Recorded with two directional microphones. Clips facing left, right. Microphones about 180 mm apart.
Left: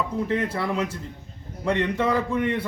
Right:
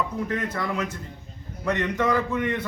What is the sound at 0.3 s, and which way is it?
A man's voice, 30° left (ahead or behind).